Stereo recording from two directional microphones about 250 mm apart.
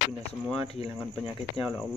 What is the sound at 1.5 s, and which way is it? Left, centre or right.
Speech, centre.